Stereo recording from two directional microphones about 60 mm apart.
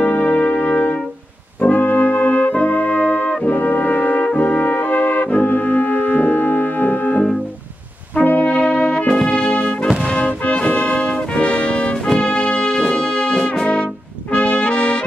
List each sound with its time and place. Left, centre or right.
0.0 s music: left
1.6 s brass instrument: left